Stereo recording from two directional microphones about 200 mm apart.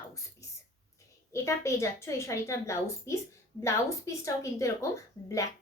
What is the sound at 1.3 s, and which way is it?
A woman's voice, 15° left (ahead or behind).